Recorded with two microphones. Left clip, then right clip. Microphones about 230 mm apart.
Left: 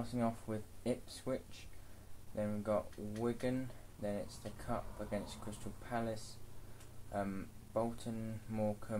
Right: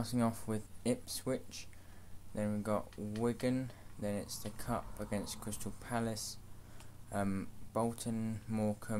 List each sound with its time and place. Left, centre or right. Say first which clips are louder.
0.0 s speech: right 3 dB; right
7.7 s speech: right 2 dB; right